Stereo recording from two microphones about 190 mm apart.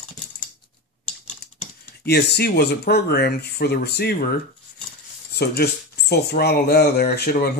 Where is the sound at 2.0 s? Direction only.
60° left (ahead or behind).